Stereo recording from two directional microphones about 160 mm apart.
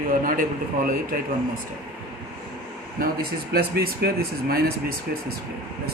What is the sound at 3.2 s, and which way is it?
Speech, 75° right (ahead or behind).